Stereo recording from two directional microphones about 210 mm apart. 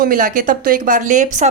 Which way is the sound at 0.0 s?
40° right (ahead or behind).